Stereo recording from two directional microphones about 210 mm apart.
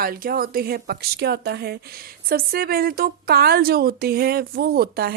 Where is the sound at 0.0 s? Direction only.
45° right (ahead or behind).